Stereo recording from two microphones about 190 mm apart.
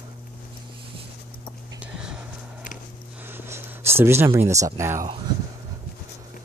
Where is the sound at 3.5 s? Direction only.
15° right (ahead or behind).